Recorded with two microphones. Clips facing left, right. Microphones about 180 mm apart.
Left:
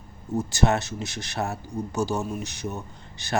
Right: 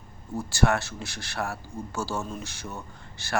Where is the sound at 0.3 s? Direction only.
20° left (ahead or behind).